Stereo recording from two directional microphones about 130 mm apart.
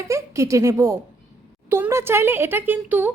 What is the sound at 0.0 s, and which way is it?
A woman's voice, 25° right (ahead or behind).